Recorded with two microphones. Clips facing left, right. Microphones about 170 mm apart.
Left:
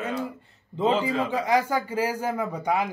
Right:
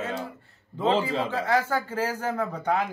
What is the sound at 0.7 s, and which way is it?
A man's voice, 20° left (ahead or behind).